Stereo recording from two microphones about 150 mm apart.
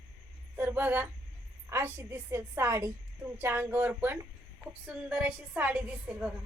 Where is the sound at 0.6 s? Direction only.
15° right (ahead or behind).